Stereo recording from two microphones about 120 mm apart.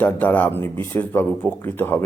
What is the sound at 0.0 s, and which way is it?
A man's voice, 15° left (ahead or behind).